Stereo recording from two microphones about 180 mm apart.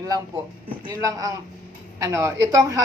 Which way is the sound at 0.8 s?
20° right (ahead or behind).